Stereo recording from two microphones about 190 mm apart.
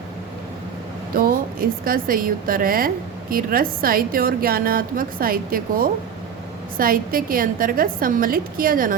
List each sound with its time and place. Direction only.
1.1 s a woman's voice: 50° right (ahead or behind)